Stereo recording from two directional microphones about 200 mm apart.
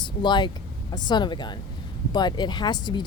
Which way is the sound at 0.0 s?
20° left (ahead or behind).